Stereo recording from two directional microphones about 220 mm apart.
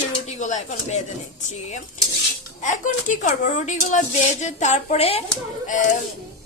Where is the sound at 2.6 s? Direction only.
35° left (ahead or behind).